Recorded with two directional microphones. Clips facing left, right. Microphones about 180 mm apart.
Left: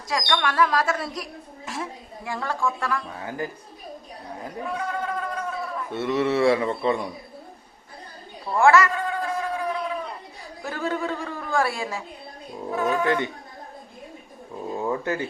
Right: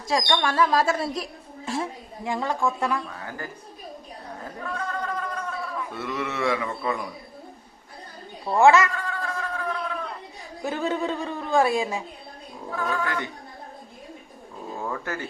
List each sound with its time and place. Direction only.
0.1 s a woman's voice: 30° right (ahead or behind)
3.1 s speech: 20° left (ahead or behind)
4.4 s a sound: 15° left (ahead or behind)
5.9 s speech: 25° left (ahead or behind)
8.4 s speech: 20° right (ahead or behind)
9.0 s a sound: 20° left (ahead or behind)
10.6 s speech: 20° right (ahead or behind)
12.7 s speech: 20° left (ahead or behind)
14.8 s speech: 20° left (ahead or behind)